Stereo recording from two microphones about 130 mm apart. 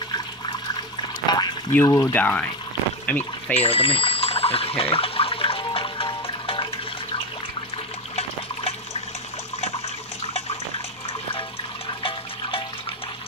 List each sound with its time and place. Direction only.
1.2 s a sound: 35° left (ahead or behind)
1.7 s speech: 20° left (ahead or behind)
3.6 s water: 45° left (ahead or behind)
10.2 s water: 50° left (ahead or behind)
12.0 s water: 45° left (ahead or behind)